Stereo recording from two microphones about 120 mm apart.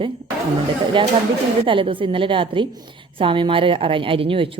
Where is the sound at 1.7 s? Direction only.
45° right (ahead or behind).